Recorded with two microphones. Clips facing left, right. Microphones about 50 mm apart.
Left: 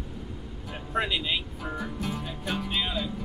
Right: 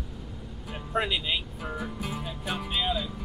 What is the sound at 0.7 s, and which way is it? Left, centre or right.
Speech, centre.